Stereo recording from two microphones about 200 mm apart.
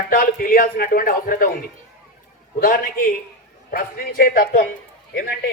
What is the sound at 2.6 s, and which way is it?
A man's voice, 45° left (ahead or behind).